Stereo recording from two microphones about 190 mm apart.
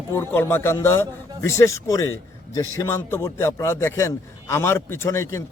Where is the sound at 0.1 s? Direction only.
10° left (ahead or behind).